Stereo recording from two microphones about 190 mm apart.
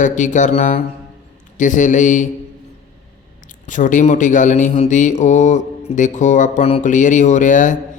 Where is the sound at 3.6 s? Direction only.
40° left (ahead or behind).